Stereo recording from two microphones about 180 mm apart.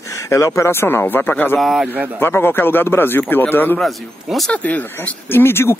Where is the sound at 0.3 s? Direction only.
15° left (ahead or behind).